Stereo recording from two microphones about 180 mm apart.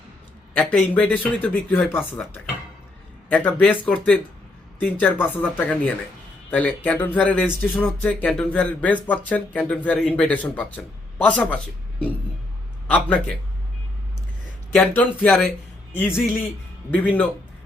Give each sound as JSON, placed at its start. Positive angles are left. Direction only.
{"t": 0.5, "sound": "speech", "side_deg": 10}
{"t": 3.2, "sound": "a man's voice", "side_deg": 5}
{"t": 14.8, "sound": "speech", "side_deg": 10}